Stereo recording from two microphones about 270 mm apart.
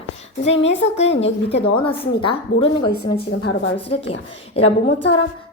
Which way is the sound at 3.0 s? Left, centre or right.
Left.